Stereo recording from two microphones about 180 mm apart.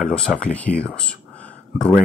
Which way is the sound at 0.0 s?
5° left (ahead or behind).